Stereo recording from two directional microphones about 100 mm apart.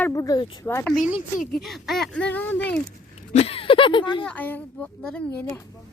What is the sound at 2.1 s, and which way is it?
Speech, 15° left (ahead or behind).